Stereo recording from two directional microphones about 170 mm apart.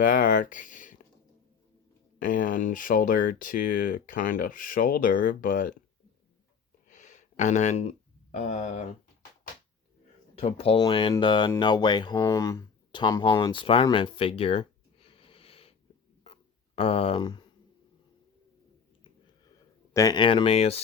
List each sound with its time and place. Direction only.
0.0 s speech: 55° left (ahead or behind)
2.1 s speech: 50° left (ahead or behind)
6.8 s a sound: 45° left (ahead or behind)
10.3 s speech: 35° left (ahead or behind)
16.2 s a sound: 35° left (ahead or behind)
19.9 s speech: 20° left (ahead or behind); by 20.8 s 35° left (ahead or behind)